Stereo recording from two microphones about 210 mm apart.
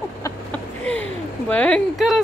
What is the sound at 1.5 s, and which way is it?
Speech, 5° left (ahead or behind).